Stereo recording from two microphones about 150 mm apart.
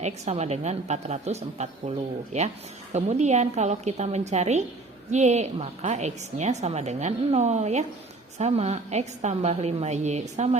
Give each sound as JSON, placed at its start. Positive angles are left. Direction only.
{"t": 0.0, "sound": "a woman's voice", "side_deg": -45}